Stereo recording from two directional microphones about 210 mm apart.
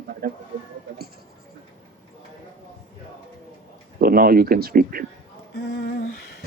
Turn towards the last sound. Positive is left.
turn(degrees=50)  # may be behind; listen again after turning